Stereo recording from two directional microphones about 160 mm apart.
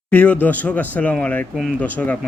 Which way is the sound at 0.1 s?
10° left (ahead or behind).